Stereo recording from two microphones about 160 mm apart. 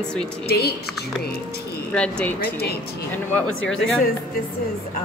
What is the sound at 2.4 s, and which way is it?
Speech, 80° left.